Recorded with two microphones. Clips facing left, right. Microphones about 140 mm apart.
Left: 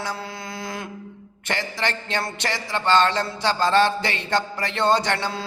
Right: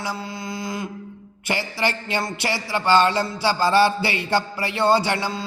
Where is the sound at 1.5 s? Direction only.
10° right (ahead or behind).